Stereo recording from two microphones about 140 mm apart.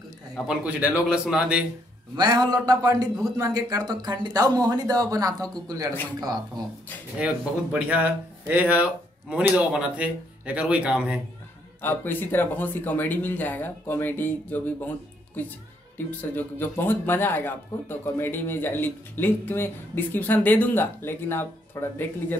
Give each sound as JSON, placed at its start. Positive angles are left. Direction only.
{"t": 0.5, "sound": "speech", "side_deg": -10}
{"t": 2.1, "sound": "a man's voice", "side_deg": -30}
{"t": 7.9, "sound": "speech", "side_deg": -10}
{"t": 11.8, "sound": "speech", "side_deg": 15}